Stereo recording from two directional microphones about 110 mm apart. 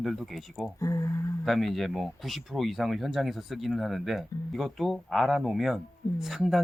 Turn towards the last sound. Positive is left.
turn(degrees=0)  # may be behind; listen again after turning